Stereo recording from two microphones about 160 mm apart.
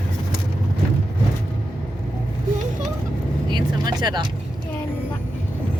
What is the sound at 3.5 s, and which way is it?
Vehicle, 25° right (ahead or behind).